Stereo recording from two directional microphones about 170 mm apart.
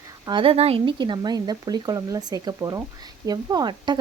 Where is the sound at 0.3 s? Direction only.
30° right (ahead or behind).